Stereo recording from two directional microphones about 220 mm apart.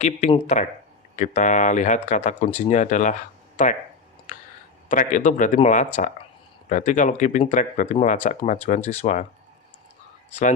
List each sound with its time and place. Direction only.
0.0 s speech: 30° left (ahead or behind)
4.9 s speech: 35° left (ahead or behind)